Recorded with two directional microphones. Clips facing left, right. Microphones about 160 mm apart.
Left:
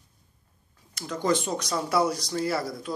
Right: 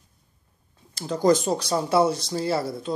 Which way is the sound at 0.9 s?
30° right (ahead or behind).